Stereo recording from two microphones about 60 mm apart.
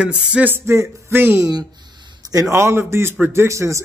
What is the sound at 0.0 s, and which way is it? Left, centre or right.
Speech, centre.